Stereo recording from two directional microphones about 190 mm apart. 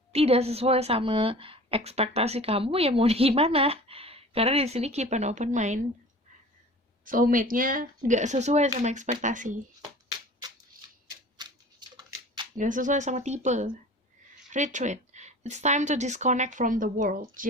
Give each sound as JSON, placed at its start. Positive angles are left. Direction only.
{"t": 0.1, "sound": "a woman's voice", "side_deg": -30}
{"t": 7.0, "sound": "a woman's voice", "side_deg": -45}
{"t": 11.3, "sound": "a sound", "side_deg": -20}
{"t": 12.5, "sound": "a woman's voice", "side_deg": -45}